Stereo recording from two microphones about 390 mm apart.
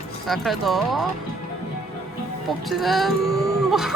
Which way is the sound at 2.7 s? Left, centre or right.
Centre.